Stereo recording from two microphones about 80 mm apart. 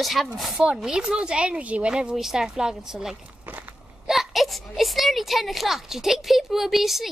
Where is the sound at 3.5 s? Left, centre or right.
Right.